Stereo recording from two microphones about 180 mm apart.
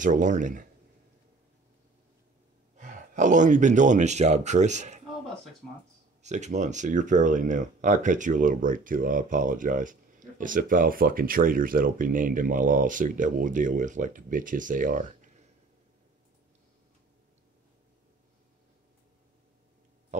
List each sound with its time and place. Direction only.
0.0 s speech: 45° right (ahead or behind)
2.8 s speech: 45° right (ahead or behind)
6.2 s speech: 40° right (ahead or behind)